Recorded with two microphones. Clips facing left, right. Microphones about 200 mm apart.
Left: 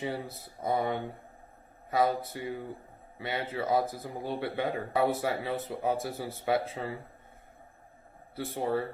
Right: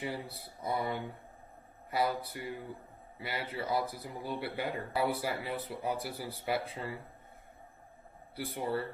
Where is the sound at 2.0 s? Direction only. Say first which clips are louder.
Left 4 dB; 25° left (ahead or behind).